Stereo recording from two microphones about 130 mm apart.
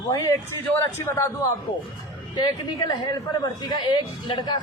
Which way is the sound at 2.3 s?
35° left (ahead or behind).